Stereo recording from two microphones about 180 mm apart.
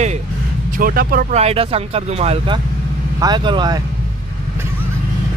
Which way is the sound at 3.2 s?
25° right (ahead or behind).